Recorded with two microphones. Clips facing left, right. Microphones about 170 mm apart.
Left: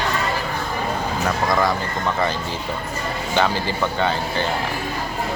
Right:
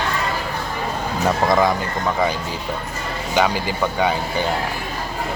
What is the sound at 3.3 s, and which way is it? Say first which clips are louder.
A man's voice: right 2 dB; 10° right (ahead or behind).